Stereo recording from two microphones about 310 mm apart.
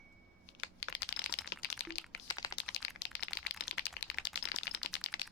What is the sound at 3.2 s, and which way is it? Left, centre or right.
Typing, left.